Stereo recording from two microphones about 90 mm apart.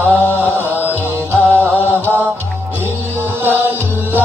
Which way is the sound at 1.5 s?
20° left (ahead or behind).